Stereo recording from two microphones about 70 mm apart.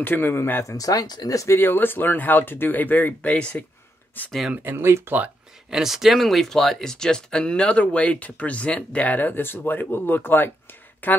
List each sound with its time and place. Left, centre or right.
0.0 s speech: left
0.7 s speech: left
1.3 s speech: left
1.6 s speech: left
4.6 s speech: right
5.7 s speech: centre; by 11.2 s left